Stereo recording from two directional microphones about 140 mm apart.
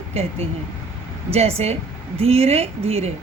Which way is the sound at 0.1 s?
45° right (ahead or behind).